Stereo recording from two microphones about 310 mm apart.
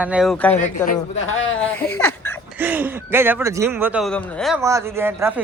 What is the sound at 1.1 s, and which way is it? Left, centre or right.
Speech, left.